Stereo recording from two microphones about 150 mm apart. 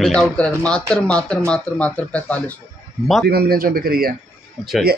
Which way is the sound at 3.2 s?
90° right.